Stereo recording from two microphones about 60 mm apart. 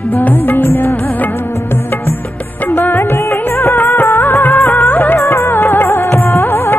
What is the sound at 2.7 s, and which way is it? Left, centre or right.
Music of bollywood, left.